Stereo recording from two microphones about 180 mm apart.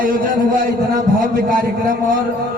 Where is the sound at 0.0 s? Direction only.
50° right (ahead or behind).